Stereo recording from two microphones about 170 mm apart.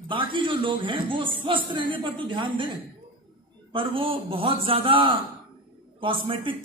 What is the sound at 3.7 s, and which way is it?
A man's voice, 30° right (ahead or behind).